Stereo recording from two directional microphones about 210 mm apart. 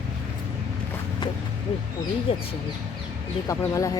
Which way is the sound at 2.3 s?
25° left (ahead or behind).